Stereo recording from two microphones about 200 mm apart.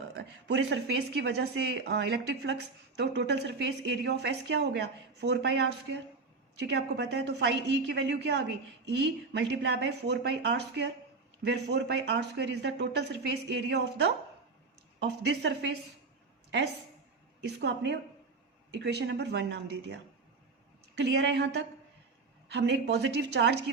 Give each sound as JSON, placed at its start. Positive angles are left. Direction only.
{"t": 0.2, "sound": "a woman's voice", "side_deg": -60}
{"t": 17.4, "sound": "a woman's voice", "side_deg": -60}
{"t": 21.0, "sound": "a woman's voice", "side_deg": -60}